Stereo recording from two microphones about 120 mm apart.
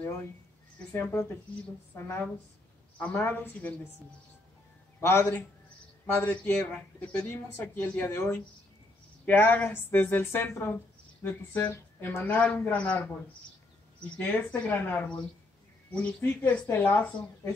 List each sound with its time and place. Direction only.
2.0 s a woman's voice: 20° left (ahead or behind)
5.0 s speech: 15° left (ahead or behind)
14.1 s speech: 15° left (ahead or behind)